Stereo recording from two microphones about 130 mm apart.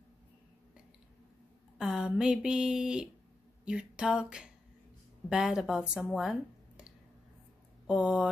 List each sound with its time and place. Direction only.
1.8 s speech: 5° right (ahead or behind)
3.6 s a sound: 5° right (ahead or behind)
5.3 s speech: 5° right (ahead or behind)
7.8 s speech: 5° right (ahead or behind)